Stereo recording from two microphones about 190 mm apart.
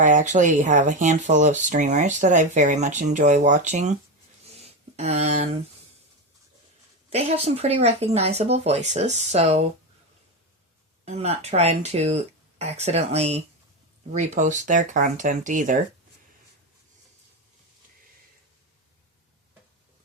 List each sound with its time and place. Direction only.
0.0 s speech: 40° right (ahead or behind)
4.6 s a sound: 35° right (ahead or behind)
7.1 s speech: 35° right (ahead or behind)
11.0 s speech: 35° right (ahead or behind)